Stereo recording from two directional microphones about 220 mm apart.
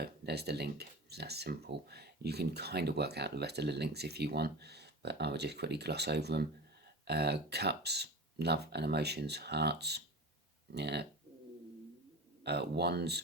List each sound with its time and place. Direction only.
0.0 s speech: 50° right (ahead or behind)
12.4 s speech: 50° right (ahead or behind)